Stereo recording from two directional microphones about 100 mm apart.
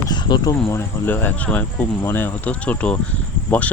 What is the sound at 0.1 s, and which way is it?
Cricket, 45° left (ahead or behind).